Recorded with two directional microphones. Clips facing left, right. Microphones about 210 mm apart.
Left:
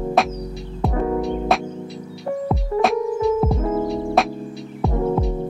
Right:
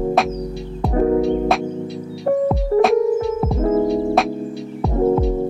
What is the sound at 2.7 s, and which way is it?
Music, 45° right (ahead or behind).